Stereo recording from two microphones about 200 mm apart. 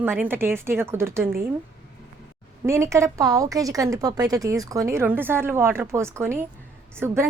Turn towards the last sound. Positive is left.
turn(degrees=-10)  # may be behind; listen again after turning